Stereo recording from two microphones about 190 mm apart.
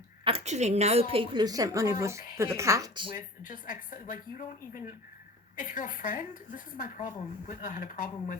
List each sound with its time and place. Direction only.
0.3 s a woman's voice: 35° right (ahead or behind)
3.2 s a woman's voice: 45° left (ahead or behind)